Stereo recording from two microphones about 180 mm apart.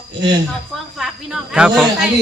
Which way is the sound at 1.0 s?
5° right (ahead or behind).